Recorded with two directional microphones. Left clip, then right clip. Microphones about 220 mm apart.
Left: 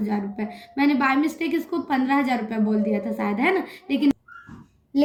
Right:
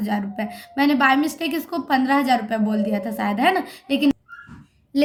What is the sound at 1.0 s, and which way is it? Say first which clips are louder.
A woman's voice: right 4 dB; 30° right (ahead or behind).